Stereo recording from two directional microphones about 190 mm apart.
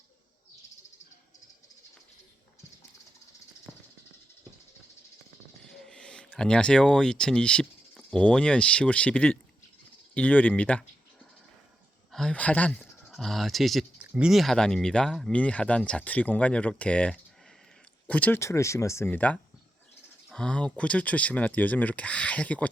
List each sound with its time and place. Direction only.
5.6 s speech: 5° left (ahead or behind)
12.1 s speech: 5° left (ahead or behind)